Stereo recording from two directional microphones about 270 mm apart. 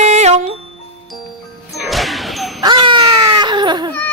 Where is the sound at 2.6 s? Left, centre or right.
Centre.